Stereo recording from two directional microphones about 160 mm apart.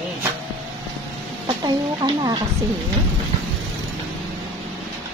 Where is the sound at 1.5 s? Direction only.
25° right (ahead or behind).